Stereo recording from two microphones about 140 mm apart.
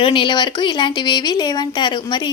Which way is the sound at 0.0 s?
35° left (ahead or behind).